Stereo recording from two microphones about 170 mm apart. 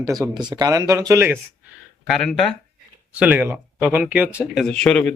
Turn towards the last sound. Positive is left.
turn(degrees=5)  # may be behind; listen again after turning